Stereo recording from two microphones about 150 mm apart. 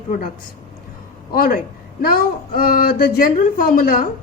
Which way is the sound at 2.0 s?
75° left (ahead or behind).